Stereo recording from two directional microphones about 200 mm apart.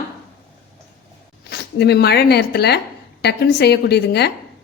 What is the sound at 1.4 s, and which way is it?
A woman's voice, 55° left (ahead or behind).